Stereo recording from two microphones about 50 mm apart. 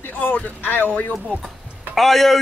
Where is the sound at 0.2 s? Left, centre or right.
Left.